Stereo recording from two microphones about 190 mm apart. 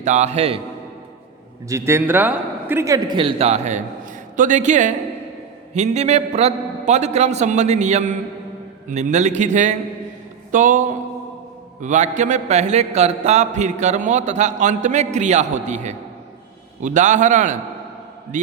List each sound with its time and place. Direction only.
0.0 s a man's voice: 40° right (ahead or behind)
1.6 s a man's voice: 15° right (ahead or behind); by 17.6 s 40° right (ahead or behind)